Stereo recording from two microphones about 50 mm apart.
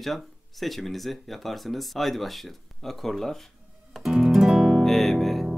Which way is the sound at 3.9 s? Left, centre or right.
Centre.